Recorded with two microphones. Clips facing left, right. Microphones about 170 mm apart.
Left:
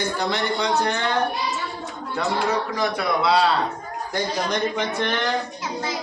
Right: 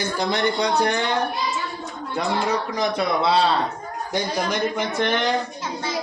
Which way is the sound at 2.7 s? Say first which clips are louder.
Right 1 dB; 20° right (ahead or behind).